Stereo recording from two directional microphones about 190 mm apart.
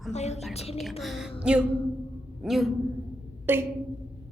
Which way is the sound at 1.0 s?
Centre (ahead or behind).